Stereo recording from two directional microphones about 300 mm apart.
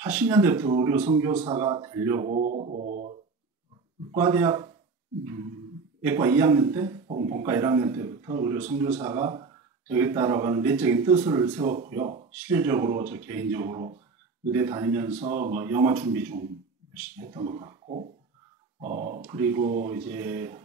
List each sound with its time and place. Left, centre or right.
0.0 s speech: centre
2.3 s speech: right
4.2 s speech: centre
6.0 s speech: centre
7.4 s speech: centre
12.4 s speech: centre
15.5 s speech: centre
19.7 s speech: right
20.1 s speech: centre